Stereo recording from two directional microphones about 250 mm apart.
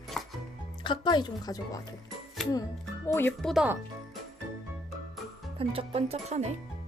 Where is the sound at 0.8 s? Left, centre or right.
Centre.